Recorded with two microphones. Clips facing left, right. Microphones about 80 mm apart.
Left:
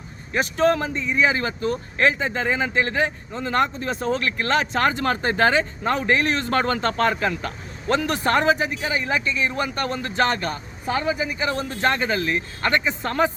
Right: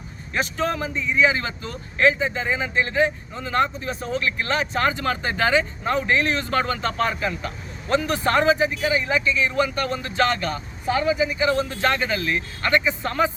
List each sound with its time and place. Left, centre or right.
0.5 s speech: left
3.8 s speech: left
4.9 s speech: left
8.3 s speech: left
8.8 s speech: left
12.8 s speech: left